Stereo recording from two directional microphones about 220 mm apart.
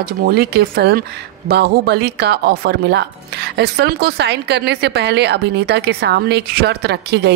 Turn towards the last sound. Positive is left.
turn(degrees=-50)  # may be behind; listen again after turning